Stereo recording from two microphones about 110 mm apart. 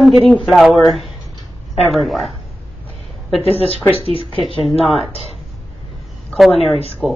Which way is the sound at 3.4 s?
60° left (ahead or behind).